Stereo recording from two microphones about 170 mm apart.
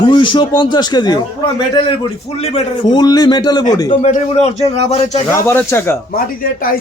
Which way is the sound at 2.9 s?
25° left (ahead or behind).